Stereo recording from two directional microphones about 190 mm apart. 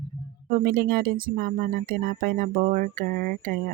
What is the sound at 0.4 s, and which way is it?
Speech, 50° right (ahead or behind).